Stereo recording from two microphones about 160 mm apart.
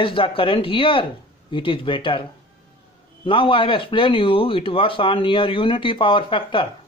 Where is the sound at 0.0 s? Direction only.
35° left (ahead or behind).